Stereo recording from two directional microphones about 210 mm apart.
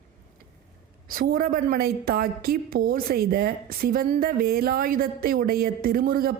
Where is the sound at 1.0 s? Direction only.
45° right (ahead or behind).